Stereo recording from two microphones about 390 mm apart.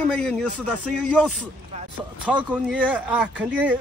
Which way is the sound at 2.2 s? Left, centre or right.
Centre.